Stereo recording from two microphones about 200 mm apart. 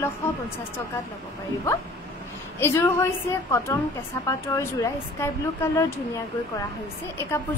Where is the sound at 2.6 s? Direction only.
10° left (ahead or behind).